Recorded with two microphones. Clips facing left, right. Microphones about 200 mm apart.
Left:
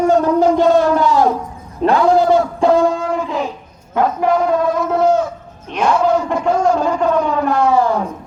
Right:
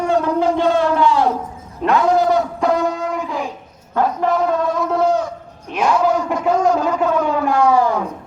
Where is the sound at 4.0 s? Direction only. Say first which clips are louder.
Left 2 dB; 15° left (ahead or behind).